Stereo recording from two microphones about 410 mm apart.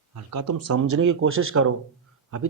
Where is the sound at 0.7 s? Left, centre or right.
Right.